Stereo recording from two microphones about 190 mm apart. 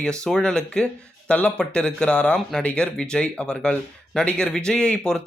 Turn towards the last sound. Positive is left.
turn(degrees=5)  # may be behind; listen again after turning